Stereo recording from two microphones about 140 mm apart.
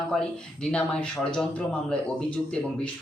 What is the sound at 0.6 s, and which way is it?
Speech, 5° left (ahead or behind).